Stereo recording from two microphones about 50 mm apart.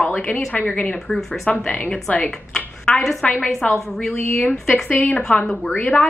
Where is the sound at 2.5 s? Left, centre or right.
Centre.